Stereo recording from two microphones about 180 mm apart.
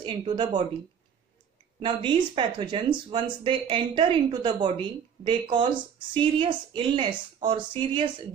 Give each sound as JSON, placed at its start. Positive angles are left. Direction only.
{"t": 0.0, "sound": "speech", "side_deg": -25}
{"t": 1.8, "sound": "speech", "side_deg": -25}